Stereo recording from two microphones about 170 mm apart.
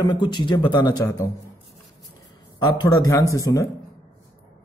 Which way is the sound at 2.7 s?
20° left (ahead or behind).